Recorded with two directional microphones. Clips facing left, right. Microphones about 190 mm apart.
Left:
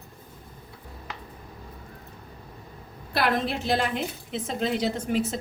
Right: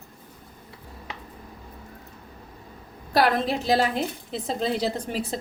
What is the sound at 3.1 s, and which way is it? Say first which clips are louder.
A woman's voice: right 4 dB; 40° right (ahead or behind).